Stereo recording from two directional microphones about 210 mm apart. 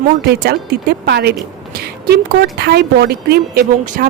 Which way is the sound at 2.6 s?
50° right (ahead or behind).